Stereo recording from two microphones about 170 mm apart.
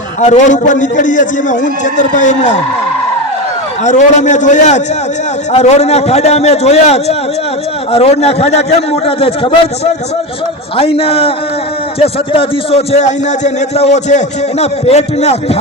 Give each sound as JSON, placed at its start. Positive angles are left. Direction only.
{"t": 0.2, "sound": "a man's voice", "side_deg": 45}
{"t": 3.8, "sound": "a man's voice", "side_deg": 45}